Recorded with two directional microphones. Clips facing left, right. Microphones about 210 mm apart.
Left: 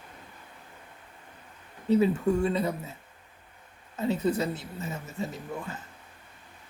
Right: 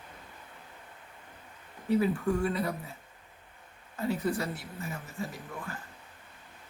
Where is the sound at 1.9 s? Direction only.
25° left (ahead or behind).